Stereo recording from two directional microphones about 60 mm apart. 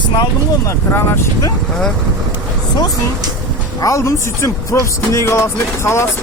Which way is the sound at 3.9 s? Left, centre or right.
Left.